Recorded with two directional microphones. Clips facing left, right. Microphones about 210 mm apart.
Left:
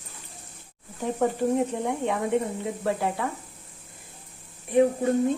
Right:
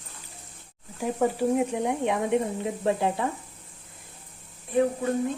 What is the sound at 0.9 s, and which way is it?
Speech, 10° right (ahead or behind).